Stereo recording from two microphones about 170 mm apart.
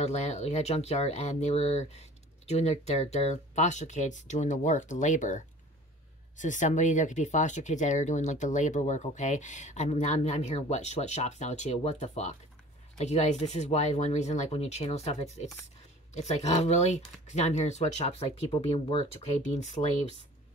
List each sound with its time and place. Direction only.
0.0 s speech: 40° left (ahead or behind)